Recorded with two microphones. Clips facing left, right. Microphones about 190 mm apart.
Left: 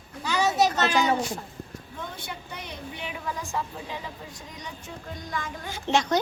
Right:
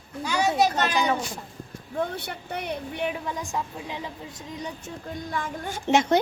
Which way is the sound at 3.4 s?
15° right (ahead or behind).